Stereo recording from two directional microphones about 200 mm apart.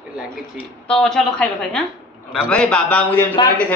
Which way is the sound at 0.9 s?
Centre (ahead or behind).